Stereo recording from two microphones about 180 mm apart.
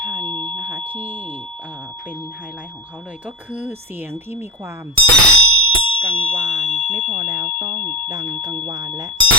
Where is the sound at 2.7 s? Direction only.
10° left (ahead or behind).